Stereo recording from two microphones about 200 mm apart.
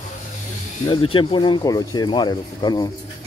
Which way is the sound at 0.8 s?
25° left (ahead or behind).